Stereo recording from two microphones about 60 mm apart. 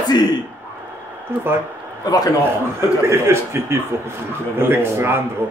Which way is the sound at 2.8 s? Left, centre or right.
Right.